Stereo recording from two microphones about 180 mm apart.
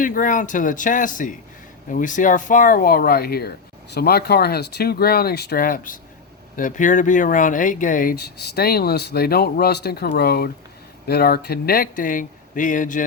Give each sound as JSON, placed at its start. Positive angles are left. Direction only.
{"t": 0.0, "sound": "speech", "side_deg": 50}